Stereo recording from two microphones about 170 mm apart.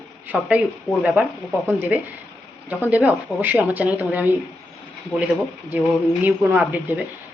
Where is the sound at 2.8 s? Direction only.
10° right (ahead or behind).